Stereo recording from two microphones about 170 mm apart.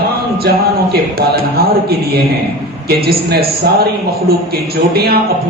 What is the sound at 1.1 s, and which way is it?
A man's voice, 65° right (ahead or behind).